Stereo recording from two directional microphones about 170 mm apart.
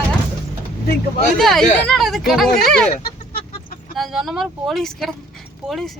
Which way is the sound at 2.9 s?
60° left (ahead or behind).